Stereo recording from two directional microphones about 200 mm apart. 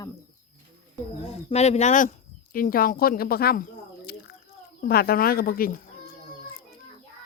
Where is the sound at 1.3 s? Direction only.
30° left (ahead or behind).